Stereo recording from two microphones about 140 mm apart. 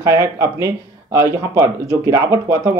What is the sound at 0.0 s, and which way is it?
Speech, 20° right (ahead or behind).